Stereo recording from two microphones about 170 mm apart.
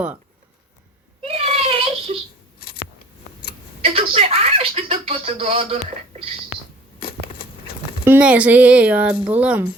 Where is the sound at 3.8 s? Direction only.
35° right (ahead or behind).